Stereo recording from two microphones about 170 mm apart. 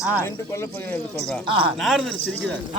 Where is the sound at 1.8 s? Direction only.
5° left (ahead or behind).